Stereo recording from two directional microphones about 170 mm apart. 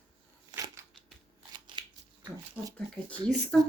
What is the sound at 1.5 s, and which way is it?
Shuffling cards, 25° right (ahead or behind).